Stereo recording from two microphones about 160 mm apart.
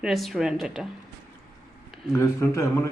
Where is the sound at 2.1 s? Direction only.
20° left (ahead or behind).